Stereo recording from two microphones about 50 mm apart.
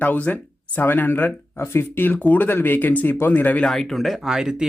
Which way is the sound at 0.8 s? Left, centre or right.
Left.